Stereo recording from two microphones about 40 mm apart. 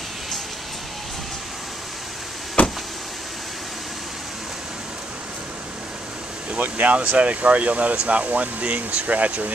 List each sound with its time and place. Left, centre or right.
2.6 s vehicle: left
6.6 s speech: right